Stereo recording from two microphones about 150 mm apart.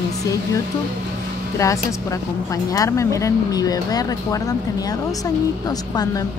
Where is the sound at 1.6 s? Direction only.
20° left (ahead or behind).